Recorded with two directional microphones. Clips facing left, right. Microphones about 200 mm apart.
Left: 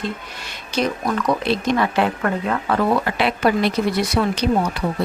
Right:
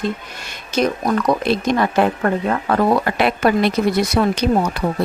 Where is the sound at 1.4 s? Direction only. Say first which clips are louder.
Right 2 dB; 45° right (ahead or behind).